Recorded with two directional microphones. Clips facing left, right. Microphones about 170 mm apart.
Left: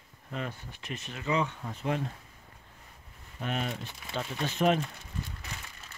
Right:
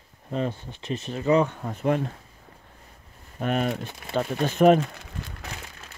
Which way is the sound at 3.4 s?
50° right (ahead or behind).